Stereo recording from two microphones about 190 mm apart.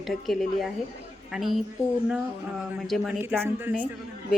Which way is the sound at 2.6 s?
Centre (ahead or behind).